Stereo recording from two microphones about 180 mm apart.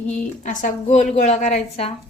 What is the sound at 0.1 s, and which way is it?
A woman's voice, 45° left (ahead or behind).